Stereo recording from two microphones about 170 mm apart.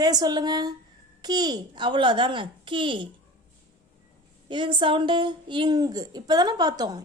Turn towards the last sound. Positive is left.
turn(degrees=-25)  # may be behind; listen again after turning